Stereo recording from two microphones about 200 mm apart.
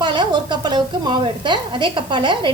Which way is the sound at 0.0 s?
25° right (ahead or behind).